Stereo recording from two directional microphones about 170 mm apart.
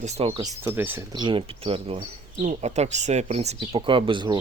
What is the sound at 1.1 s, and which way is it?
Speech, 30° right (ahead or behind).